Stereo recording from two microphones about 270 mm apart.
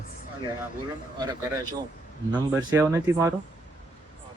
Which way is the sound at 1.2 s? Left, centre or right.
Centre.